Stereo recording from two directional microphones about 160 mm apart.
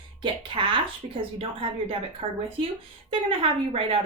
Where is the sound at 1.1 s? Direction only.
35° right (ahead or behind).